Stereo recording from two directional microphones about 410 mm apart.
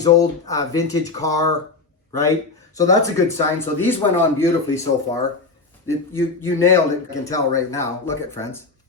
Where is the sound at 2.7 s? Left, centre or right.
Centre.